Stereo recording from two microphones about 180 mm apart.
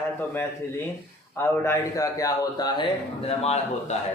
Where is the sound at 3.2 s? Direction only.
35° left (ahead or behind).